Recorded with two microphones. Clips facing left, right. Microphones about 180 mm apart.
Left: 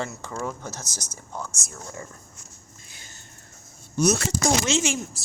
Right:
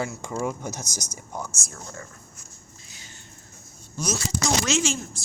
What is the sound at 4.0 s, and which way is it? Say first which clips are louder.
Speech: left 6 dB; 60° left (ahead or behind).